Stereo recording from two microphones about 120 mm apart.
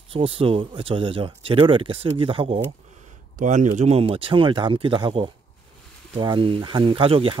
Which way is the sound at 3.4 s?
90° right.